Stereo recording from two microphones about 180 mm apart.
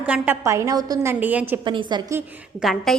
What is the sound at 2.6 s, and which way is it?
Speech, centre (ahead or behind).